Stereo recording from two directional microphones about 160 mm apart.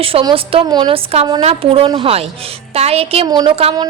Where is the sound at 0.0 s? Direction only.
35° right (ahead or behind).